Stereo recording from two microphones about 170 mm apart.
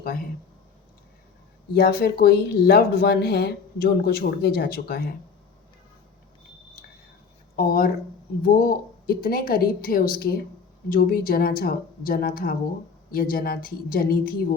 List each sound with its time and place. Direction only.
1.7 s speech: 65° left (ahead or behind)
7.5 s speech: 60° left (ahead or behind)